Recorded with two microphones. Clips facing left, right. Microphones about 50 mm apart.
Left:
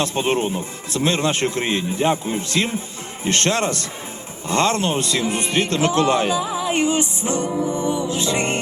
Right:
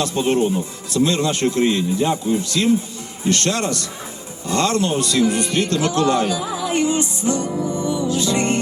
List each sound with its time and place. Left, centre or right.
0.0 s a man's voice: left